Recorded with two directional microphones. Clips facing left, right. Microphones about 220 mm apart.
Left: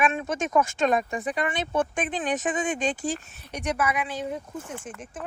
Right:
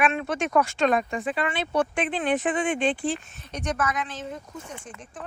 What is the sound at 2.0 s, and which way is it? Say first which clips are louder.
Speech: right 2 dB; 45° left (ahead or behind).